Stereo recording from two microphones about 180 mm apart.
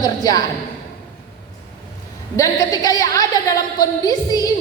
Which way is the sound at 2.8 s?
20° left (ahead or behind).